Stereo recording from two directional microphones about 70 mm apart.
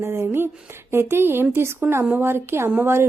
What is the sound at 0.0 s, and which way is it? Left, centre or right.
A woman's voice, right.